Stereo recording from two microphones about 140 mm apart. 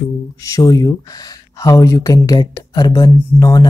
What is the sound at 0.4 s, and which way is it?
Speech, 25° left (ahead or behind).